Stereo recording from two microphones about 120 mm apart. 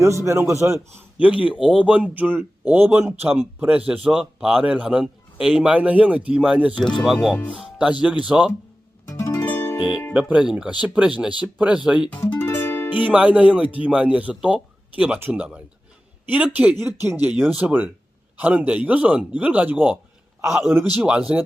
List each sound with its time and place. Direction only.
0.0 s a man's voice: 25° right (ahead or behind)
1.2 s speech: 10° right (ahead or behind)
6.7 s speech: 5° left (ahead or behind)
7.5 s speech: 10° right (ahead or behind)
9.0 s music: 25° left (ahead or behind)
10.2 s speech: 10° right (ahead or behind)
12.2 s music: 20° left (ahead or behind)
12.9 s speech: 15° right (ahead or behind)